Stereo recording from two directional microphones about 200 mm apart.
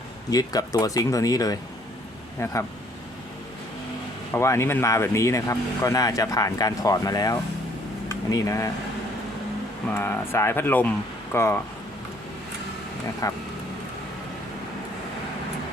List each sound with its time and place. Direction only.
0.3 s speech: 20° left (ahead or behind)
4.3 s speech: 15° left (ahead or behind)
9.9 s speech: 10° left (ahead or behind)
13.2 s speech: 15° left (ahead or behind)